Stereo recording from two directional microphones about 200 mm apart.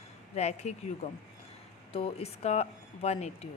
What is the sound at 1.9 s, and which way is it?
Speech, 30° left (ahead or behind).